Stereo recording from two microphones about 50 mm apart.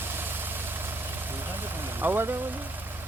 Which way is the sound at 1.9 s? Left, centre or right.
Right.